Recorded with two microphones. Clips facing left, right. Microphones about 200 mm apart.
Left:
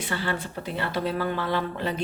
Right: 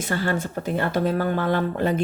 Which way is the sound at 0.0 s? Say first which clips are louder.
Right 5 dB; 45° right (ahead or behind).